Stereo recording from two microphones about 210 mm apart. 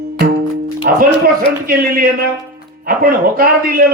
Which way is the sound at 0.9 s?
50° right (ahead or behind).